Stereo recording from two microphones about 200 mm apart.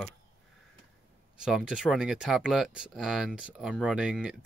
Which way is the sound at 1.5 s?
5° right (ahead or behind).